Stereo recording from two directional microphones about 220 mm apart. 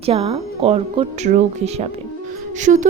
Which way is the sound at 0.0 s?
25° right (ahead or behind).